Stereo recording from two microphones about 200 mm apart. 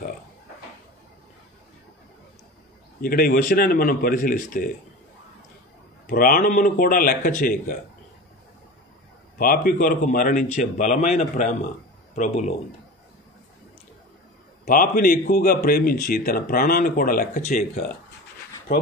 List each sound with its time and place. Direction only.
3.0 s a man's voice: 45° left (ahead or behind)
6.0 s a man's voice: 45° left (ahead or behind)
9.4 s a man's voice: 45° left (ahead or behind)
14.6 s a man's voice: 45° left (ahead or behind)